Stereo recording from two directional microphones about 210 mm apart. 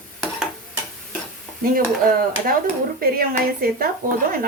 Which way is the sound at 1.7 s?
45° right (ahead or behind).